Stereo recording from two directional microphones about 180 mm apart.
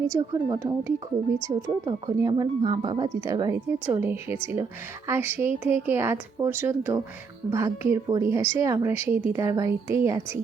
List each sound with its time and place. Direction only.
0.1 s speech: 20° right (ahead or behind)